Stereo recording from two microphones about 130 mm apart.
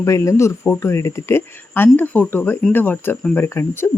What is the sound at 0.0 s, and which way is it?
Speech, 25° left (ahead or behind).